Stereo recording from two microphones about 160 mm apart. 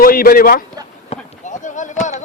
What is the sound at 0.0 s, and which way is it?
Speech, 65° left (ahead or behind).